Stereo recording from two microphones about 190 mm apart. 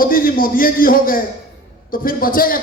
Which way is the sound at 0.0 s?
50° left (ahead or behind).